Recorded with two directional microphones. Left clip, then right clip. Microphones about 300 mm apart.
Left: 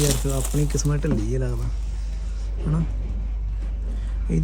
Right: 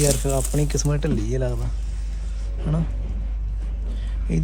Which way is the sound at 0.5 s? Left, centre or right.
Centre.